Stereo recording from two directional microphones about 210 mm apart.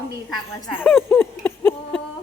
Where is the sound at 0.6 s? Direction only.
Centre (ahead or behind).